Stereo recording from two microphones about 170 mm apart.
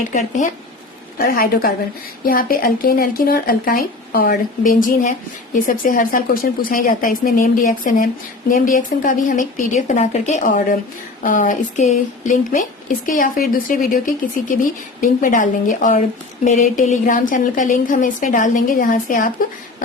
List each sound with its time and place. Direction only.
0.1 s a woman's voice: 45° left (ahead or behind)
1.2 s a woman's voice: 60° left (ahead or behind)